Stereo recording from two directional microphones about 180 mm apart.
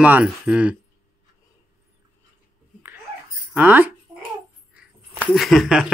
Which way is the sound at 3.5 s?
10° right (ahead or behind).